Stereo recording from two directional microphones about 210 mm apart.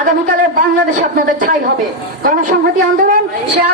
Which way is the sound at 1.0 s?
40° right (ahead or behind).